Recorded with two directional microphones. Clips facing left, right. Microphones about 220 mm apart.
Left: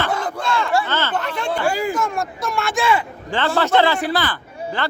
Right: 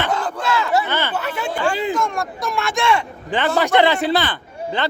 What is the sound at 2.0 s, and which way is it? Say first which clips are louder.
A man's voice: even; centre (ahead or behind).